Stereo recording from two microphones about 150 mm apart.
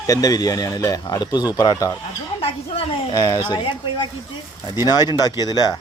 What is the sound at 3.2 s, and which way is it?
Speech, 25° left (ahead or behind).